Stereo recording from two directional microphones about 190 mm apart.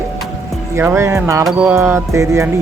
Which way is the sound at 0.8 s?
15° right (ahead or behind).